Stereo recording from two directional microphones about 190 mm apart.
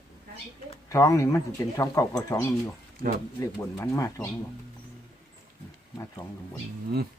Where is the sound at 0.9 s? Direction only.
15° left (ahead or behind).